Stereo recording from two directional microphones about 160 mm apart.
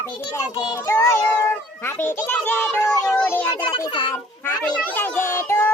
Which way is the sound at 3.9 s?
30° left (ahead or behind).